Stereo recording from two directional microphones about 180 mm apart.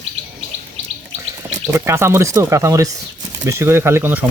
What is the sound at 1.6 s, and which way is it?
Speech, 15° right (ahead or behind).